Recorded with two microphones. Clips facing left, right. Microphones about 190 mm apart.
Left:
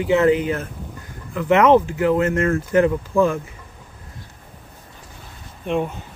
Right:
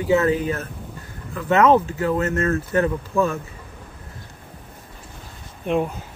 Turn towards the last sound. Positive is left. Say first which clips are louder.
# right 1 dB
turn(degrees=0)  # may be behind; listen again after turning